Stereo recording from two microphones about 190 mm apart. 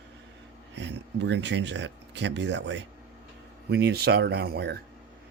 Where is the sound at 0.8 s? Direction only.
70° right (ahead or behind).